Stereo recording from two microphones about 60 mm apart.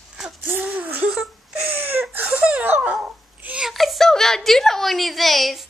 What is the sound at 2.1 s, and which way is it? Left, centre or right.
Speech, right.